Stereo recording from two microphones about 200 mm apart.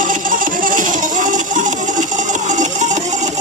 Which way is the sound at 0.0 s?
45° right (ahead or behind).